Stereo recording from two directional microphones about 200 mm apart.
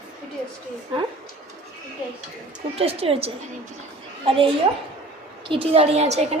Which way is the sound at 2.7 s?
30° right (ahead or behind).